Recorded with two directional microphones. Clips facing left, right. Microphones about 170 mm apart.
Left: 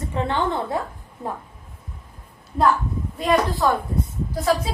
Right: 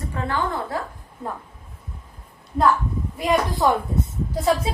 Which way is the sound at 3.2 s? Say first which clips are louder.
Left 1 dB; 10° right (ahead or behind).